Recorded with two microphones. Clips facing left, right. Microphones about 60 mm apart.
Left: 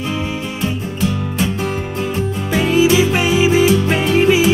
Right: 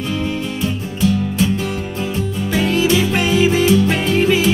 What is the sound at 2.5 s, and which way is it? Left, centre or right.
Music, centre.